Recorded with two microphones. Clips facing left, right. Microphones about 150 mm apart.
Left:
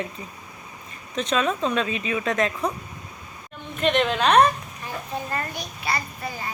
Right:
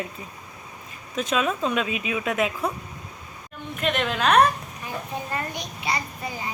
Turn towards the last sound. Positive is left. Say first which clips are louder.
# even
turn(degrees=-15)  # may be behind; listen again after turning